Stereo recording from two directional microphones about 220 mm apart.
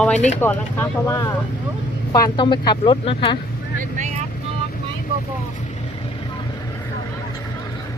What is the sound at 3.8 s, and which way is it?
Vehicle, 35° right (ahead or behind).